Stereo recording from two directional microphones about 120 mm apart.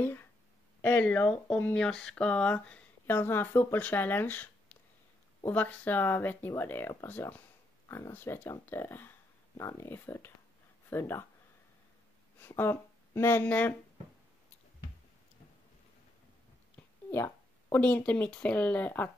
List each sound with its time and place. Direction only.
0.0 s speech: 20° left (ahead or behind)
12.4 s speech: 20° left (ahead or behind)
17.1 s speech: 20° left (ahead or behind)